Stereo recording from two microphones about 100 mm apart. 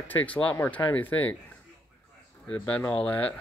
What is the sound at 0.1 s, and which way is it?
Speech, 15° left (ahead or behind).